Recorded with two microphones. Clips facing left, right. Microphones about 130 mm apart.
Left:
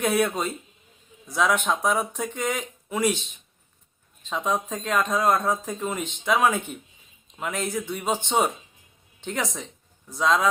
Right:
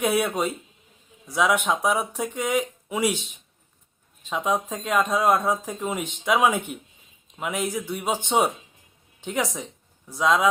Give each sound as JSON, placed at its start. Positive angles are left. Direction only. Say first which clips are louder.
{"t": 0.0, "sound": "speech", "louder": "even", "side_deg": -10}